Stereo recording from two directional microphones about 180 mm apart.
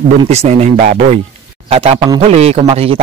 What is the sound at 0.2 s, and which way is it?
A man's voice, 35° right (ahead or behind).